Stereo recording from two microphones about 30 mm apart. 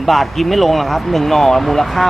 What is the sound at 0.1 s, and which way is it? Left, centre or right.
Speech, centre.